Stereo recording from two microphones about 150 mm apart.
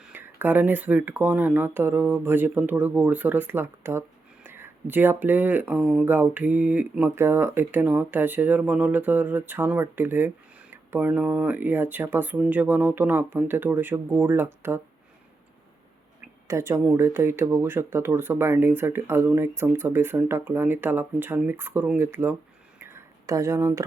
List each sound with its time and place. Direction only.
0.0 s speech: 15° right (ahead or behind)
16.5 s speech: 20° right (ahead or behind)
22.8 s a sound: 20° right (ahead or behind)